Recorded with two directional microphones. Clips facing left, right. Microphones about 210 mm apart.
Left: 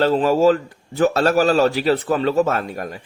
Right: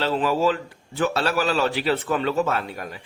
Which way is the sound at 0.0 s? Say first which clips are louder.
Left 6 dB; 45° left (ahead or behind).